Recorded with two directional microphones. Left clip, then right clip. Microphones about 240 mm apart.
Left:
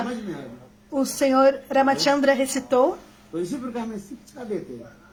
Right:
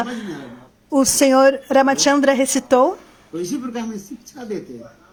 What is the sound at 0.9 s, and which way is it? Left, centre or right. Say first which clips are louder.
A woman's voice: right 6 dB; right.